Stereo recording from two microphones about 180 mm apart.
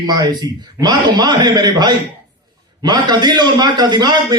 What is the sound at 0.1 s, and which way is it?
A man's voice, 25° right (ahead or behind).